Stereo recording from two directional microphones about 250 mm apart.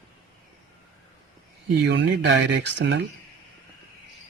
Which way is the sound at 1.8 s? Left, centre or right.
Right.